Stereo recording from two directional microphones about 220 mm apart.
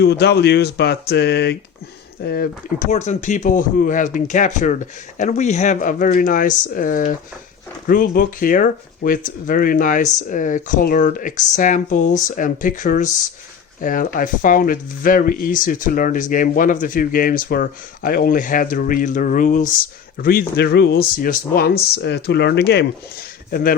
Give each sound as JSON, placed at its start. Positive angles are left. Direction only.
{"t": 0.0, "sound": "speech", "side_deg": 50}